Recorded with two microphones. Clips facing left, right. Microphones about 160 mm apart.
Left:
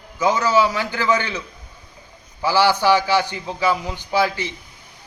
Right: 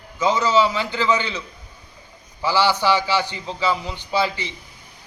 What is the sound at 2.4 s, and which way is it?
A man's voice, 15° left (ahead or behind).